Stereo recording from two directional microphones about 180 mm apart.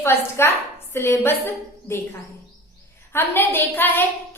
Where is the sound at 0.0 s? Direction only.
15° left (ahead or behind).